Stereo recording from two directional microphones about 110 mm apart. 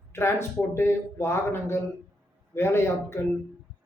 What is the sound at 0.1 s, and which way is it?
Speech, 25° left (ahead or behind).